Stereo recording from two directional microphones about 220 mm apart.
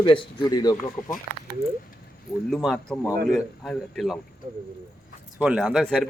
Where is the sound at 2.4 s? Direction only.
Centre (ahead or behind).